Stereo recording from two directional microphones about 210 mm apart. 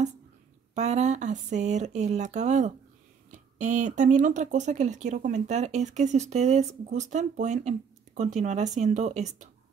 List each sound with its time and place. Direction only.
0.7 s speech: 35° right (ahead or behind)